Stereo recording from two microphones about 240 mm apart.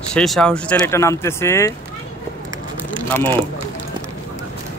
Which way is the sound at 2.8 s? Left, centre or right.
Centre.